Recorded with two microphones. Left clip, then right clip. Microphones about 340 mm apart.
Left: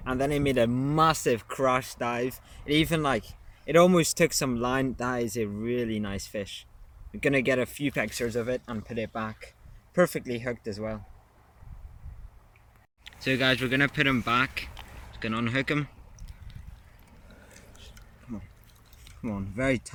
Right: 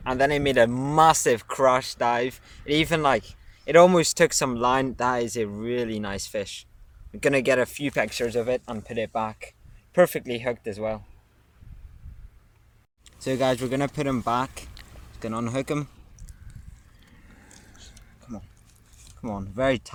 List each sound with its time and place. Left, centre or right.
0.0 s speech: right
13.1 s speech: right
19.2 s speech: right